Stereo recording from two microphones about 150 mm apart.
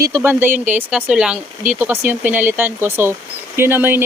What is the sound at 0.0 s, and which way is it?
Speech, 15° right (ahead or behind).